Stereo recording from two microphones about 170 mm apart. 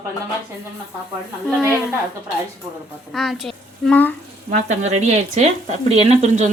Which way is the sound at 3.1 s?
Centre (ahead or behind).